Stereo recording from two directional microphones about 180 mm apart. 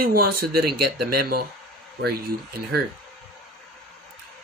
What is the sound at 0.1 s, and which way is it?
Speech, 55° right (ahead or behind).